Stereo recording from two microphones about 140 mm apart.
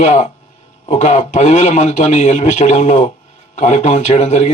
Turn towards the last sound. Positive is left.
turn(degrees=55)  # may be behind; listen again after turning